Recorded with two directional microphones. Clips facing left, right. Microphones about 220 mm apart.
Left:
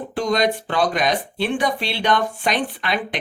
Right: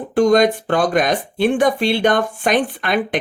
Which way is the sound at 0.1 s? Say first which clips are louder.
Right 8 dB; 50° right (ahead or behind).